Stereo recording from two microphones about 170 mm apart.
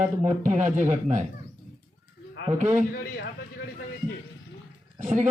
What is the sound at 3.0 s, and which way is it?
Speech, 80° left.